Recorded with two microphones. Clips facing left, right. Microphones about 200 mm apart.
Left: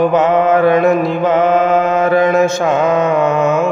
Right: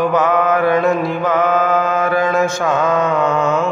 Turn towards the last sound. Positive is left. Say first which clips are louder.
# left 3 dB
turn(degrees=20)  # may be behind; listen again after turning